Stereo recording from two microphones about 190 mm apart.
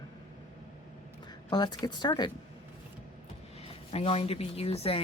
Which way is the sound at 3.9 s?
30° left (ahead or behind).